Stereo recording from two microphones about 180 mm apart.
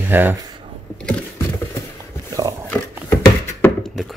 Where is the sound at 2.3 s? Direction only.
20° right (ahead or behind).